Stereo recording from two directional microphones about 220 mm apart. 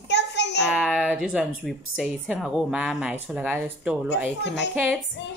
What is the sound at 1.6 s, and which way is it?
Speech, 5° right (ahead or behind).